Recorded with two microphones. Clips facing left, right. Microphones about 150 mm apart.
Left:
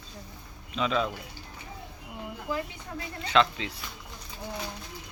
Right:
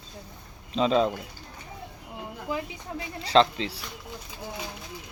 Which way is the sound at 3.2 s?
30° right (ahead or behind).